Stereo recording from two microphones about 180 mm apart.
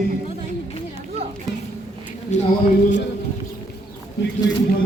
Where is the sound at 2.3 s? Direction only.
40° left (ahead or behind).